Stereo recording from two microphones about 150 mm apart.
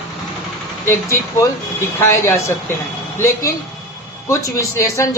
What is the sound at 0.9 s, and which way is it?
Speech, 20° left (ahead or behind).